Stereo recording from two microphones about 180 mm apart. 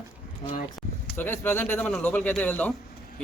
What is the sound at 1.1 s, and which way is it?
Speech, 10° left (ahead or behind).